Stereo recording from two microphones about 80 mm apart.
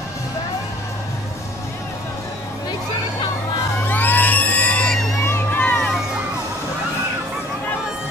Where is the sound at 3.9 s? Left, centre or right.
Left.